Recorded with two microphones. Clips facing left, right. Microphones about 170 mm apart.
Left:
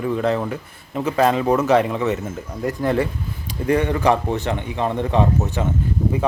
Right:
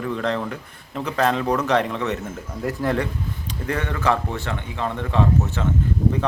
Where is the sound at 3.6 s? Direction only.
15° left (ahead or behind).